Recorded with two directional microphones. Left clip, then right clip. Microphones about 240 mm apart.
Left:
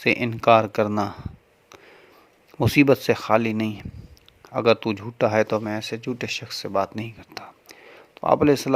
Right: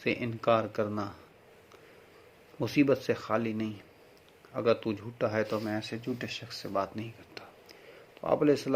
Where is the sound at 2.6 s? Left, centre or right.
Left.